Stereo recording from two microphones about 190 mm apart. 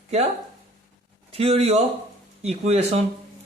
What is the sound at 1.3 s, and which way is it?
A woman's voice, 30° right (ahead or behind).